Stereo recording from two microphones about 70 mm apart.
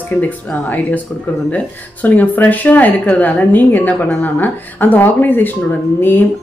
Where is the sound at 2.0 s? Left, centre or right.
Left.